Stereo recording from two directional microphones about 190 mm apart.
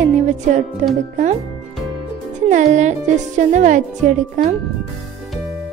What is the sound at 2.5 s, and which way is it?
Speech, 40° right (ahead or behind).